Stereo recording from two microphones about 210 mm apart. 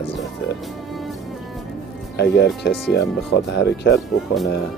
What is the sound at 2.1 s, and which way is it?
Speech, 50° left (ahead or behind).